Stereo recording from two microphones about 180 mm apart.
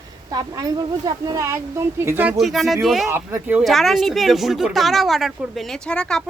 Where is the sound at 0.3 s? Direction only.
20° right (ahead or behind); by 3.1 s centre (ahead or behind).